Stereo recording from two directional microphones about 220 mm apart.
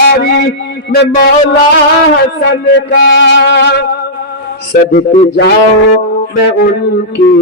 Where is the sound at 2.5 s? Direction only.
55° left (ahead or behind).